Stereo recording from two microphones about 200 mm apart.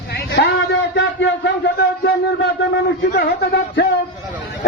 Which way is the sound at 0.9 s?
60° left (ahead or behind).